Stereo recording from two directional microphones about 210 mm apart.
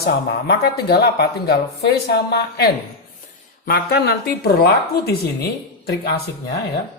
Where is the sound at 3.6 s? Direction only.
50° left (ahead or behind).